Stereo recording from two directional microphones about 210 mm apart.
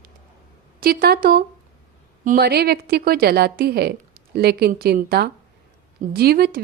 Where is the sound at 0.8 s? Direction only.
45° right (ahead or behind).